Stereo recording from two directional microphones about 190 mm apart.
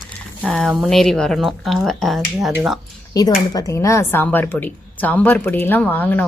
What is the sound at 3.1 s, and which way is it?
Speech, 20° left (ahead or behind).